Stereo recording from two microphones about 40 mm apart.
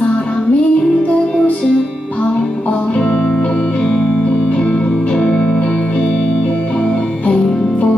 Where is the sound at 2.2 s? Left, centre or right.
Left.